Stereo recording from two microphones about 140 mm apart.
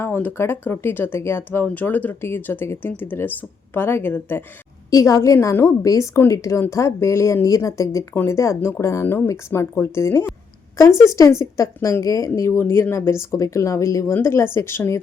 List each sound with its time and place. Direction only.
0.0 s a woman's voice: 15° left (ahead or behind)